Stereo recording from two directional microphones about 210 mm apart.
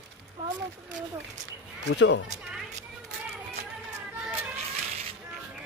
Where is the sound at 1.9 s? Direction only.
55° left (ahead or behind).